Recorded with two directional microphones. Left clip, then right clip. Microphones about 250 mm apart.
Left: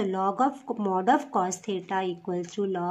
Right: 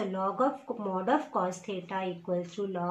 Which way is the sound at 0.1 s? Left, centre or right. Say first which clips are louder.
Left 3 dB; left.